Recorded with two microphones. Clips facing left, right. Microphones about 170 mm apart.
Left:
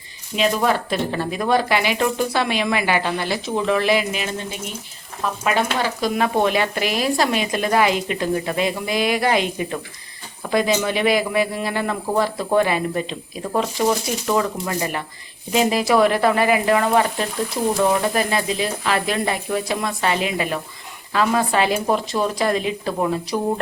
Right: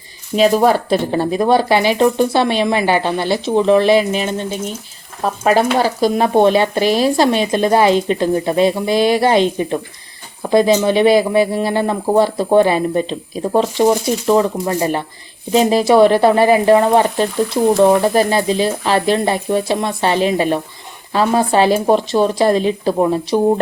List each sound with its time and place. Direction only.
0.3 s speech: 40° right (ahead or behind)